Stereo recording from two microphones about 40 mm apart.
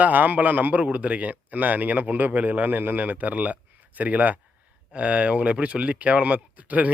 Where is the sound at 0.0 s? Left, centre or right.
Right.